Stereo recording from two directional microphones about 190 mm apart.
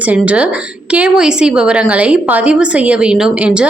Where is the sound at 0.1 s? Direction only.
5° right (ahead or behind).